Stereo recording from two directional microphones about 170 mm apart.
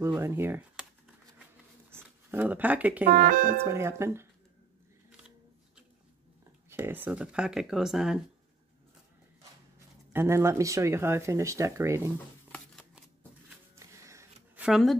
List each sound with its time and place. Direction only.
0.0 s speech: 15° right (ahead or behind)
1.9 s speech: 15° right (ahead or behind)
3.1 s speech: 55° right (ahead or behind)
3.6 s speech: 15° right (ahead or behind)
6.7 s speech: 15° right (ahead or behind)
10.1 s speech: 15° right (ahead or behind)
13.7 s a sound: 15° right (ahead or behind)
14.7 s speech: centre (ahead or behind)